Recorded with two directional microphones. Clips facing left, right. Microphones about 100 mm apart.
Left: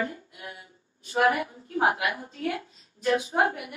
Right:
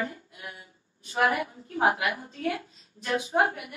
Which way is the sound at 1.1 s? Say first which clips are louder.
Left 2 dB; 25° left (ahead or behind).